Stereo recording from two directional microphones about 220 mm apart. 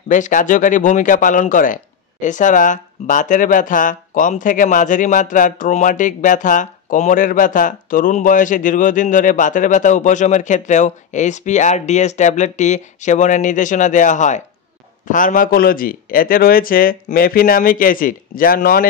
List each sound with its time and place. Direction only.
0.1 s speech: 35° left (ahead or behind)